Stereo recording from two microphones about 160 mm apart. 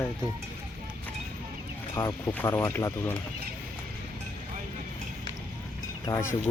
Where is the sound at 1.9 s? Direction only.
15° left (ahead or behind).